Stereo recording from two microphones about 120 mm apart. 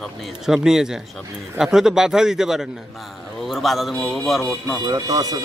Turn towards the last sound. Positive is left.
turn(degrees=-30)  # may be behind; listen again after turning